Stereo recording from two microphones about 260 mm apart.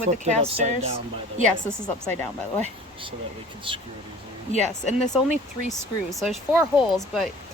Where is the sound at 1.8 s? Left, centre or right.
Centre.